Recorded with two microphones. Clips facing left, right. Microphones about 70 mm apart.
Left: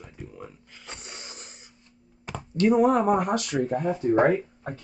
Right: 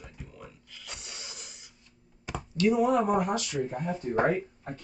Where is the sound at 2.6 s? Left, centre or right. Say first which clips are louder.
Left 4 dB; left.